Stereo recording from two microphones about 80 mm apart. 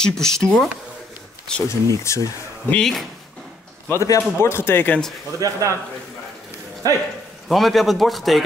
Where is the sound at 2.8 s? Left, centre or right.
Centre.